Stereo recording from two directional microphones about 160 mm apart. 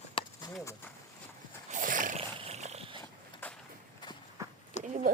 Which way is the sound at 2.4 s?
45° right (ahead or behind).